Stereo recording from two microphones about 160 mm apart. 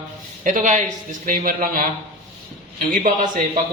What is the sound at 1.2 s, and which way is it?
Mantra, 60° right (ahead or behind).